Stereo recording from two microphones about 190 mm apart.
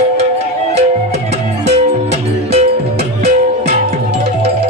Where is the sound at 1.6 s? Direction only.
35° right (ahead or behind).